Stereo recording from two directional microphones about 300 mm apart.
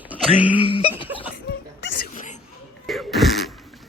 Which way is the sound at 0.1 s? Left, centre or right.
Centre.